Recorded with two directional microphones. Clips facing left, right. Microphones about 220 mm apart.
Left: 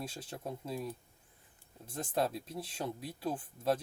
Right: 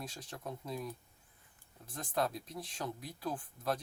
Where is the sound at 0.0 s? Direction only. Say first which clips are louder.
Left 3 dB; 30° left (ahead or behind).